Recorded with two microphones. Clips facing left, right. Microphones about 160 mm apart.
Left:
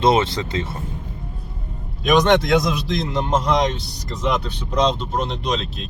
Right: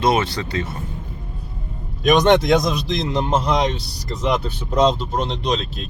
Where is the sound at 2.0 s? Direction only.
Centre (ahead or behind).